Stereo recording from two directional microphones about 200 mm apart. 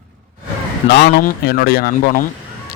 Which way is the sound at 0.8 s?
55° left (ahead or behind).